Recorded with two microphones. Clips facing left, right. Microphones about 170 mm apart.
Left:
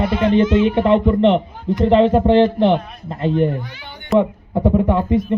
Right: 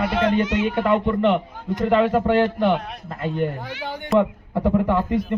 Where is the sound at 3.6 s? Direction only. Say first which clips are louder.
Right 5 dB; 90° right.